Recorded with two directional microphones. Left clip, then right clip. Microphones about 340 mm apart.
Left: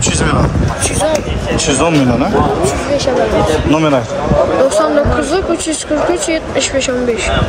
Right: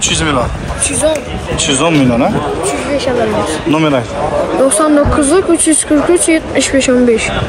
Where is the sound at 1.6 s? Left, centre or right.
Centre.